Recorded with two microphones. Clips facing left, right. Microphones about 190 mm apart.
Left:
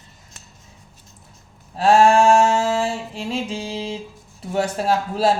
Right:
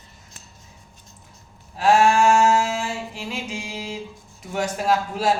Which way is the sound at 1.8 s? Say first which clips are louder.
Left 3 dB; 30° left (ahead or behind).